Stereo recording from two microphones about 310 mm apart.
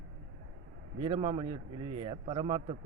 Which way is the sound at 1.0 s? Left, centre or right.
Centre.